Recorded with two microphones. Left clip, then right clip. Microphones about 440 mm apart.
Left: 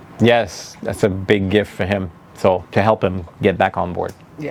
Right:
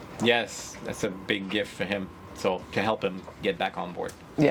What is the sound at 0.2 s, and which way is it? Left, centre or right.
Speech, left.